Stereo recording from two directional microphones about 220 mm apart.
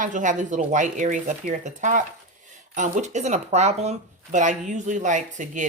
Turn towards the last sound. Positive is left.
turn(degrees=-35)  # may be behind; listen again after turning